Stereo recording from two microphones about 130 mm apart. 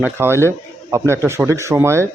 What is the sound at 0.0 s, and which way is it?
A man's voice, 20° right (ahead or behind).